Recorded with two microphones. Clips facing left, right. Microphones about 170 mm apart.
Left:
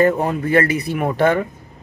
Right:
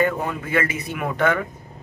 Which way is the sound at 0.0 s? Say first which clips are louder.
Left 6 dB; 40° left (ahead or behind).